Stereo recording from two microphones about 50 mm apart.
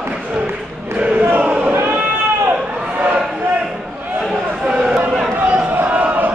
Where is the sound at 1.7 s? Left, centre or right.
Right.